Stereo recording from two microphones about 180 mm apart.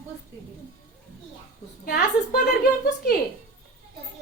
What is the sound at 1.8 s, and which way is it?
Speech, 55° left (ahead or behind).